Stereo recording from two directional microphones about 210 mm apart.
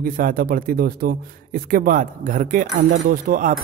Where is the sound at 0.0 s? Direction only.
45° right (ahead or behind).